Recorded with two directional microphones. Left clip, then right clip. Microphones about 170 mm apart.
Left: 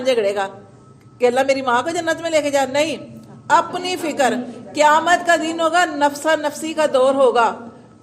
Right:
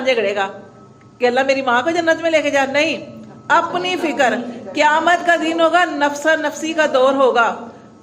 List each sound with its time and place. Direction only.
0.0 s a woman's voice: 40° left (ahead or behind)